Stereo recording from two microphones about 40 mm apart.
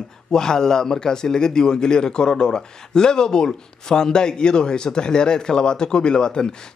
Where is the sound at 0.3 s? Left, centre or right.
Centre.